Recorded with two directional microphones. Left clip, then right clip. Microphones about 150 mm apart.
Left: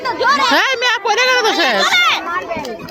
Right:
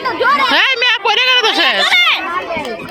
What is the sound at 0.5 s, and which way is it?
Speech, 20° left (ahead or behind).